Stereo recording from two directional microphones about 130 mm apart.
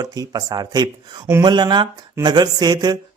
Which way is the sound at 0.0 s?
30° right (ahead or behind).